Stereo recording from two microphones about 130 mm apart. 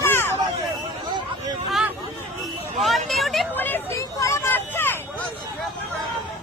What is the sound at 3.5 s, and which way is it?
Vehicle, 15° left (ahead or behind).